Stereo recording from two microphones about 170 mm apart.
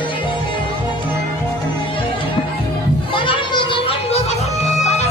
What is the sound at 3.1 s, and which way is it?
Music, 30° left (ahead or behind).